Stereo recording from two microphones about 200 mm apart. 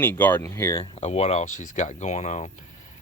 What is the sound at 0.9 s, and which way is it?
Speech, 30° left (ahead or behind).